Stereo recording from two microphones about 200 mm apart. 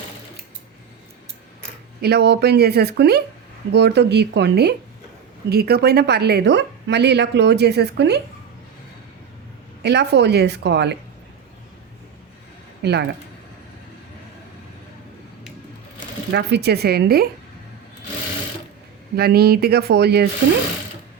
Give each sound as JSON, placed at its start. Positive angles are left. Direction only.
{"t": 2.0, "sound": "a woman's voice", "side_deg": -55}
{"t": 9.8, "sound": "a woman's voice", "side_deg": -55}
{"t": 12.8, "sound": "speech", "side_deg": -55}
{"t": 16.3, "sound": "speech", "side_deg": -55}
{"t": 19.1, "sound": "speech", "side_deg": -50}